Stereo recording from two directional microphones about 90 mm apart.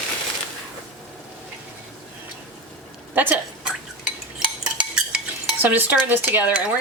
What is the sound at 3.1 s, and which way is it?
Speech, 20° right (ahead or behind).